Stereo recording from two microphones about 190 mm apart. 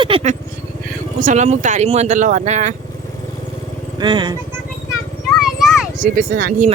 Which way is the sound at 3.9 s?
25° right (ahead or behind).